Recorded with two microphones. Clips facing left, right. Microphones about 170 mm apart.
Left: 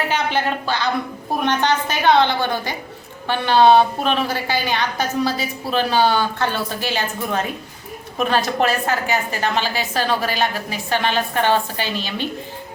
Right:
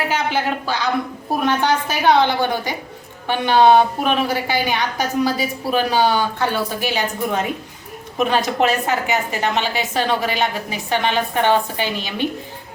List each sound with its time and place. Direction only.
0.1 s a woman's voice: 10° right (ahead or behind)